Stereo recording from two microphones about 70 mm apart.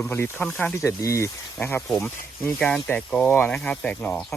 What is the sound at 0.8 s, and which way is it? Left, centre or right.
Speech, left.